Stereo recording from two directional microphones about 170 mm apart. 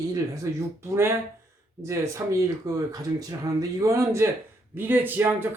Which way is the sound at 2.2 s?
15° right (ahead or behind).